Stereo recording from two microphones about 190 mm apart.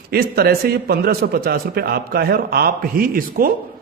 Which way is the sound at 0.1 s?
55° right (ahead or behind).